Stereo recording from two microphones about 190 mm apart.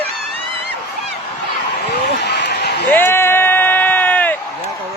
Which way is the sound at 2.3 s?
65° left (ahead or behind).